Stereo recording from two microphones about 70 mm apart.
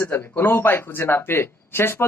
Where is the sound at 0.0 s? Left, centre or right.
Left.